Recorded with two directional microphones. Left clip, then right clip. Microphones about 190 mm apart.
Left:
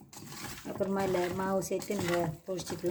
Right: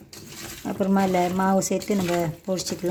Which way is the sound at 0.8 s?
40° right (ahead or behind).